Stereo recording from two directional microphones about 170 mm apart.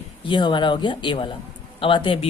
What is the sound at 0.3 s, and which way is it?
Speech, 25° left (ahead or behind).